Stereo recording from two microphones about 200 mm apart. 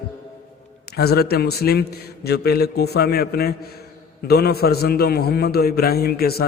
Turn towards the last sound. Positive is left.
turn(degrees=50)  # may be behind; listen again after turning